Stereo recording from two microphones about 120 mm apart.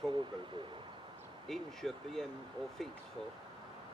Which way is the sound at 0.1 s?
40° right (ahead or behind).